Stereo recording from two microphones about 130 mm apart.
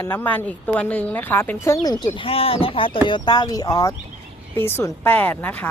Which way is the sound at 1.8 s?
30° left (ahead or behind).